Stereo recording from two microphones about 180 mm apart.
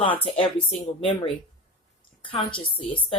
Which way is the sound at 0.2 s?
30° left (ahead or behind).